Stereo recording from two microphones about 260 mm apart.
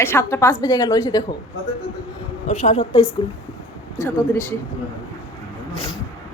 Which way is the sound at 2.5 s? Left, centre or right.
Left.